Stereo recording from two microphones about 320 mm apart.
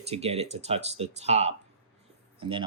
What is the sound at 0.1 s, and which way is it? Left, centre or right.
Speech, centre.